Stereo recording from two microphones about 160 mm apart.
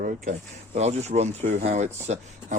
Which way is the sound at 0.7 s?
40° right (ahead or behind).